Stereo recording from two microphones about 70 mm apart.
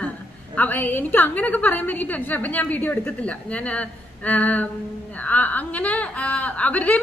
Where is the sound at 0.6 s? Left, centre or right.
Left.